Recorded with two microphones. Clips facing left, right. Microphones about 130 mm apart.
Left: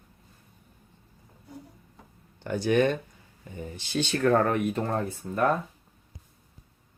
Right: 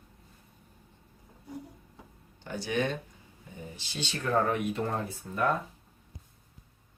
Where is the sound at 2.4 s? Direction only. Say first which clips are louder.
Left 8 dB; 55° left (ahead or behind).